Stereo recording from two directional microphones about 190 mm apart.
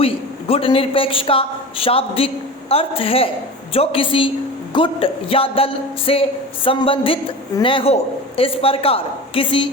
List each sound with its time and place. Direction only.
0.0 s a man's voice: 30° left (ahead or behind)